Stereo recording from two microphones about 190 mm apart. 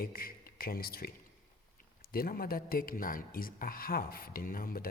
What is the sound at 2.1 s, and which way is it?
Speech, 50° left (ahead or behind).